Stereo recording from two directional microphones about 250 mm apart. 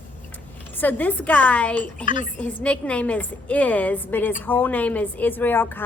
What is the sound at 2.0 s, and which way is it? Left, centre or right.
Speech, left.